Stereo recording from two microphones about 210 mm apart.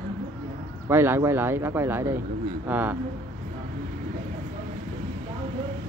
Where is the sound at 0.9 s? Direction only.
10° right (ahead or behind).